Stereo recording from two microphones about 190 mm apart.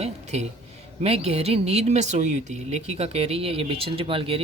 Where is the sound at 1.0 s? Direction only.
30° right (ahead or behind).